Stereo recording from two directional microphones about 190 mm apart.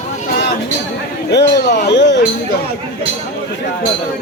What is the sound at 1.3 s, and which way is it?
Speech, 65° left (ahead or behind).